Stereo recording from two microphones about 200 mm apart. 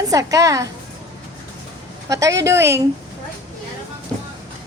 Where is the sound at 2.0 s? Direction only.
15° right (ahead or behind).